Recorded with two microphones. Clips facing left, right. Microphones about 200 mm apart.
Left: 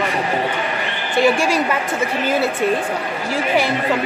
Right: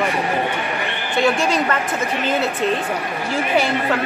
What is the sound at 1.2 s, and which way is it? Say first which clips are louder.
Speech: left 2 dB; 10° left (ahead or behind).